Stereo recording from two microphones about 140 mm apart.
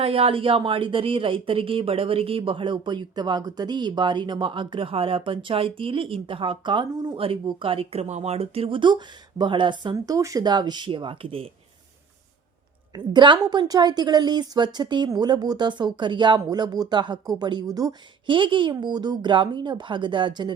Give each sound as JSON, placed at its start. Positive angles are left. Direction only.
{"t": 0.0, "sound": "speech", "side_deg": -40}
{"t": 13.1, "sound": "speech", "side_deg": -35}